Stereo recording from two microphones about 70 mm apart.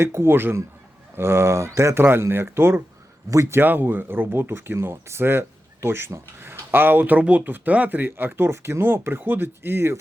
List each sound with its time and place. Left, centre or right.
0.0 s speech: right
2.0 s speech: right
3.2 s a man's voice: right
3.6 s speech: right